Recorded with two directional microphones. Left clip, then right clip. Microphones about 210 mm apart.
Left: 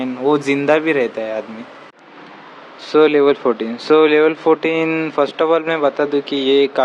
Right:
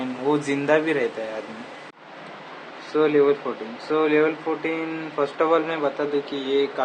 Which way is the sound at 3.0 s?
45° left (ahead or behind).